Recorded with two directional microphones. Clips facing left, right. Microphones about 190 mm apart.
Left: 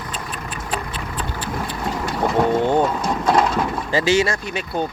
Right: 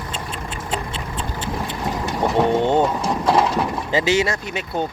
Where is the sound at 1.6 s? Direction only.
20° right (ahead or behind).